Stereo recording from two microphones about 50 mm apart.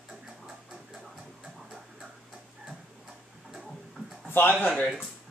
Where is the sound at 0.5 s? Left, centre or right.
Centre.